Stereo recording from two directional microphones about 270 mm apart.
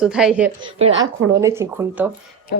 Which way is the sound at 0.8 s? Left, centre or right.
Right.